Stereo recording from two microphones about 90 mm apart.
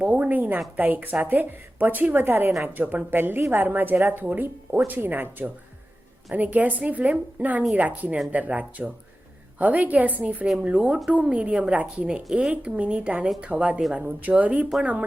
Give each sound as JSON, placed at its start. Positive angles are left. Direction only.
{"t": 0.0, "sound": "a woman's voice", "side_deg": -15}